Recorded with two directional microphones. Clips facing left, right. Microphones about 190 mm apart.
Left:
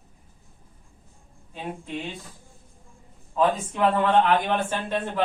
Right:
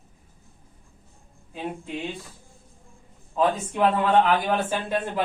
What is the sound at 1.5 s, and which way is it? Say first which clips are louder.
Speech: right 1 dB; 5° right (ahead or behind).